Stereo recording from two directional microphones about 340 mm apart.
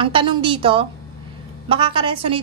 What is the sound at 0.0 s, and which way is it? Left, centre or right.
A woman's voice, centre.